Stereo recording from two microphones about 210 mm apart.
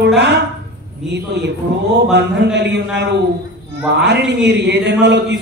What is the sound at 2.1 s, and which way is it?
A man's voice, 55° right (ahead or behind).